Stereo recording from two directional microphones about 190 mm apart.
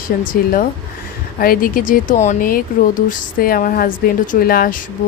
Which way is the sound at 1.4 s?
50° left (ahead or behind).